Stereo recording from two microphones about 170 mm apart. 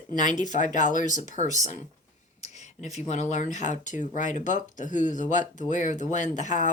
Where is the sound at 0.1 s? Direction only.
50° left (ahead or behind).